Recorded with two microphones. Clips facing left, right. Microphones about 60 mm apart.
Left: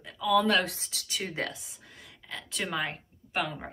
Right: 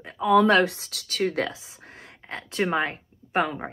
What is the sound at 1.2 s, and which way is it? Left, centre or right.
Speech, right.